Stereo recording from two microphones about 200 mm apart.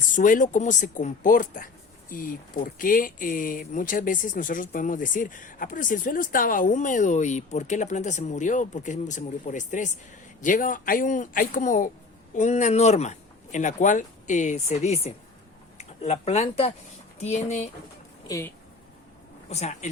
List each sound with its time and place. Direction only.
0.2 s speech: 40° left (ahead or behind)
18.3 s speech: 15° left (ahead or behind)
19.5 s speech: 35° left (ahead or behind)